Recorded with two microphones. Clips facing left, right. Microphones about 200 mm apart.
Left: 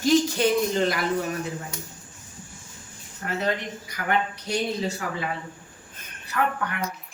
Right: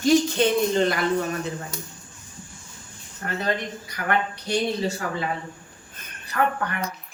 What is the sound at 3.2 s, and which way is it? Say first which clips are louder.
Speech: even; 40° right (ahead or behind).